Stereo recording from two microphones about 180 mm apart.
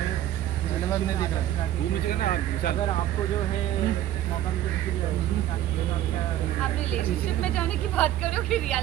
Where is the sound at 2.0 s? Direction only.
55° left (ahead or behind).